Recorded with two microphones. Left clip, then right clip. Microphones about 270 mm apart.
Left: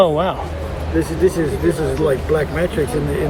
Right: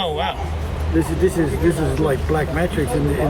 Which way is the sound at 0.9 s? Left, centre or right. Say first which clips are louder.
Left 2 dB; centre.